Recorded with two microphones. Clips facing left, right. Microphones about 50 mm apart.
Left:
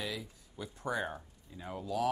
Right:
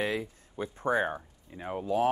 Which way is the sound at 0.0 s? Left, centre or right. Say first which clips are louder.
Right 9 dB; right.